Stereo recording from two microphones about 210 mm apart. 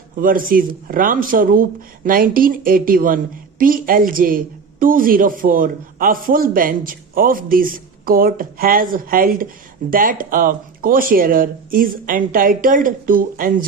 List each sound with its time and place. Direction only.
0.2 s a woman's voice: 40° right (ahead or behind)